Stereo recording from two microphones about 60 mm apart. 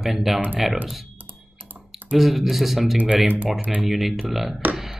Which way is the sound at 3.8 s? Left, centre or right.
Centre.